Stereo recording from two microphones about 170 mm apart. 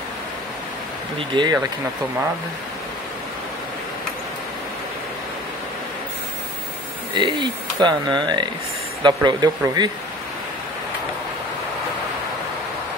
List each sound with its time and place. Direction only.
1.3 s speech: 25° right (ahead or behind)
7.2 s speech: 25° right (ahead or behind)